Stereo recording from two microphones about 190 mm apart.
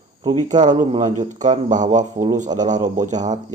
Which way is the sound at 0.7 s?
20° right (ahead or behind).